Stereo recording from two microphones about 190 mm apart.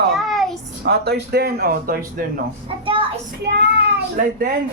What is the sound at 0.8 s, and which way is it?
Speech, 60° right (ahead or behind).